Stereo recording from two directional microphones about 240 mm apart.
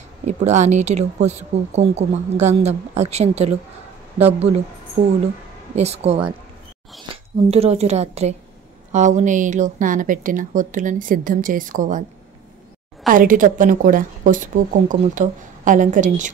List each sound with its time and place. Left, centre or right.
0.2 s speech: right
5.8 s speech: right
7.1 s a sound: right
7.4 s a woman's voice: right
13.1 s a woman's voice: right